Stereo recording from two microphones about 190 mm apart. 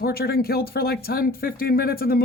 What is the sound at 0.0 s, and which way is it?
Speech, 55° left (ahead or behind).